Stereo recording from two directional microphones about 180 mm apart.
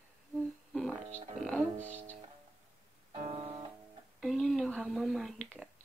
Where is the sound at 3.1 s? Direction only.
35° right (ahead or behind).